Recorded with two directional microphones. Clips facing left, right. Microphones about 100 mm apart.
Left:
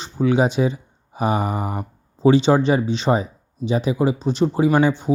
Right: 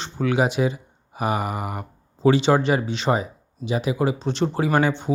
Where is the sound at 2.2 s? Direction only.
20° left (ahead or behind).